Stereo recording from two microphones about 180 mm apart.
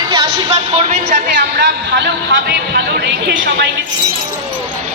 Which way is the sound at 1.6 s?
70° right (ahead or behind).